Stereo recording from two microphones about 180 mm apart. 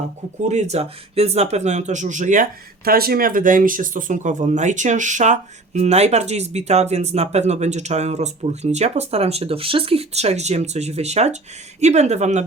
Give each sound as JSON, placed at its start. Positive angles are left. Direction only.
{"t": 0.4, "sound": "speech", "side_deg": -40}